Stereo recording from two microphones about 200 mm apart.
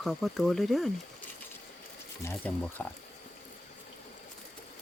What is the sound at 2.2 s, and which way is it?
Speech, 10° left (ahead or behind).